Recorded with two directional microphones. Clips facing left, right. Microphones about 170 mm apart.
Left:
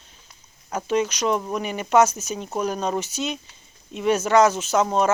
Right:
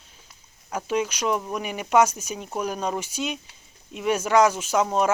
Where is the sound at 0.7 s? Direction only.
10° right (ahead or behind).